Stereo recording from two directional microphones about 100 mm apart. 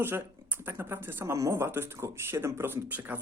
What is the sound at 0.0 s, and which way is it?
Speech, 20° right (ahead or behind).